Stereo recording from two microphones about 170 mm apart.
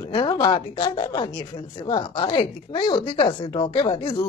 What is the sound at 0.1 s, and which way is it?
Speech, 25° left (ahead or behind).